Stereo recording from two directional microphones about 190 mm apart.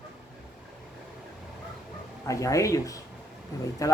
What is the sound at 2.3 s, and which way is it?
Speech, 15° left (ahead or behind).